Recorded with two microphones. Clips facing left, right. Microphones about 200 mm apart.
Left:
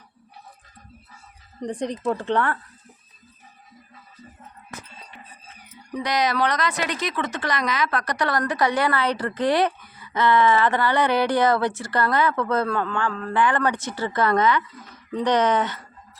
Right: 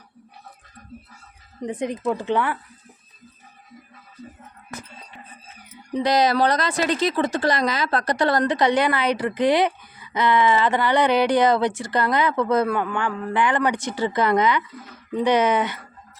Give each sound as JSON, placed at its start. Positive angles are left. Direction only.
{"t": 1.6, "sound": "speech", "side_deg": -5}
{"t": 5.9, "sound": "speech", "side_deg": -25}